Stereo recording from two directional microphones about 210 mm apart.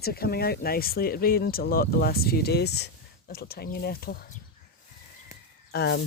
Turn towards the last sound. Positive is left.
turn(degrees=50)  # may be behind; listen again after turning